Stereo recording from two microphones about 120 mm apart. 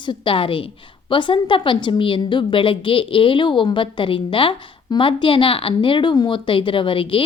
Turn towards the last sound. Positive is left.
turn(degrees=45)  # may be behind; listen again after turning